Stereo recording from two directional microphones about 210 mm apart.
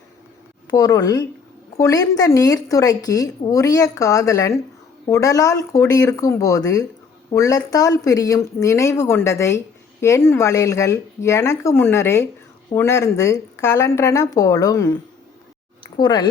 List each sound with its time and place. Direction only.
0.7 s a woman's voice: 15° left (ahead or behind)